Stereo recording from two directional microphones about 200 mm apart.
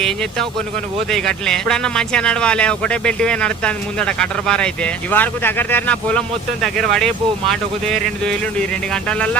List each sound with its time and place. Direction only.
1.1 s speech: 5° left (ahead or behind)